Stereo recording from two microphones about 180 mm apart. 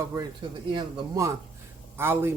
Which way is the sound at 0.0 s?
15° right (ahead or behind).